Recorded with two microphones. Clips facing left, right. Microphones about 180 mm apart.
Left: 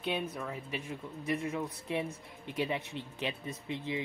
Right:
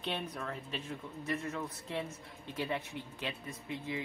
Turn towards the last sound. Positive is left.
turn(degrees=20)  # may be behind; listen again after turning